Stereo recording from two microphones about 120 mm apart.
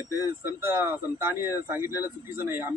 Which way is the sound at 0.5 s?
20° right (ahead or behind).